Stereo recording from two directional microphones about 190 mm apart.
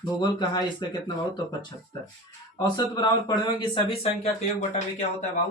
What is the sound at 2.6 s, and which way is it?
Speech, 20° left (ahead or behind).